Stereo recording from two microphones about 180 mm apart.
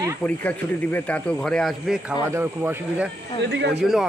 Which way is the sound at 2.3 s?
15° right (ahead or behind).